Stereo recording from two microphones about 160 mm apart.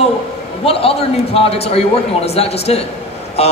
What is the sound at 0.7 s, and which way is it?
A man's voice, 35° left (ahead or behind).